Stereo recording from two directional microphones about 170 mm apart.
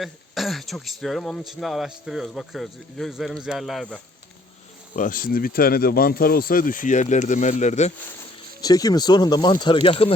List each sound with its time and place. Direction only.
0.0 s speech: centre (ahead or behind)
4.9 s speech: 55° left (ahead or behind)
8.6 s speech: 20° left (ahead or behind)